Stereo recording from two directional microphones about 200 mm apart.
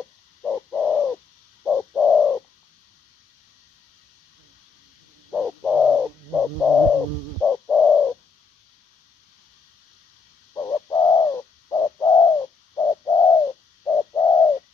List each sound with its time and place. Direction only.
0.4 s bird: 5° left (ahead or behind)
5.3 s bird: centre (ahead or behind)
7.4 s bird: 5° left (ahead or behind)
10.5 s bird: 15° left (ahead or behind)